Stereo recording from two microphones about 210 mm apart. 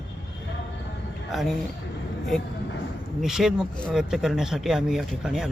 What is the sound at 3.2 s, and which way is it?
Speech, centre (ahead or behind).